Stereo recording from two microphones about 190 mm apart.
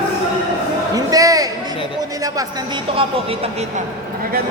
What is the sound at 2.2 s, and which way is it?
Music, 20° right (ahead or behind).